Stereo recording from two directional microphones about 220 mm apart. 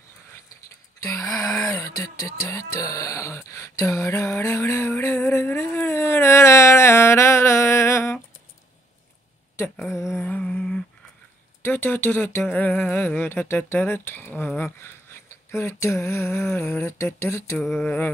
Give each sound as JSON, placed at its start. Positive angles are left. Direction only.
{"t": 1.0, "sound": "speech", "side_deg": 15}
{"t": 9.8, "sound": "a sound", "side_deg": 10}
{"t": 11.6, "sound": "speech", "side_deg": 10}